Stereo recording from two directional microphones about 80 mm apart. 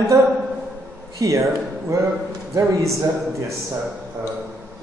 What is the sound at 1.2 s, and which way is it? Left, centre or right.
A man's voice, right.